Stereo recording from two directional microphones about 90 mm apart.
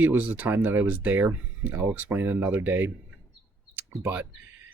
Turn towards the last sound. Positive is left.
turn(degrees=-15)  # may be behind; listen again after turning